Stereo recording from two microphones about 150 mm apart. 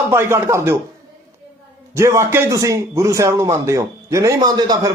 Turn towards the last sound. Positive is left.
turn(degrees=-25)  # may be behind; listen again after turning